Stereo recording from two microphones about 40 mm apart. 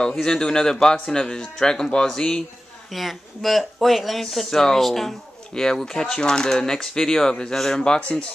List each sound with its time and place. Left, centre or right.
0.2 s speech: centre
2.9 s speech: centre
5.5 s speech: centre
8.0 s speech: left